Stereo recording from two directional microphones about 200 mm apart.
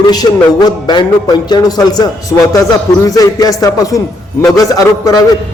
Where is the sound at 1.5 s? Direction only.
20° left (ahead or behind).